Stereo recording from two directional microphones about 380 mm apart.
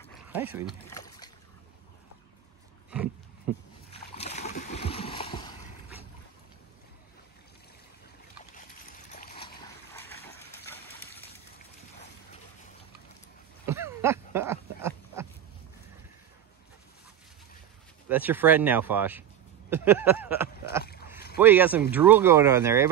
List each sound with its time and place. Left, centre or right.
0.3 s speech: centre
0.8 s boat: centre
3.9 s splash: centre
8.5 s splash: left
11.0 s a sound: centre
13.7 s a sound: centre
18.0 s speech: centre
20.8 s rowboat: left
21.4 s speech: centre